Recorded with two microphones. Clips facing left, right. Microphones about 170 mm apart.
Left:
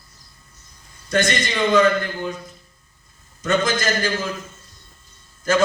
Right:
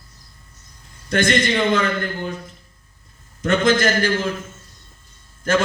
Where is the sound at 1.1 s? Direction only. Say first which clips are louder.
Right 3 dB; 55° right (ahead or behind).